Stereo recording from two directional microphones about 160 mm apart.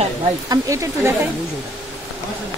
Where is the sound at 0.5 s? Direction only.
20° right (ahead or behind).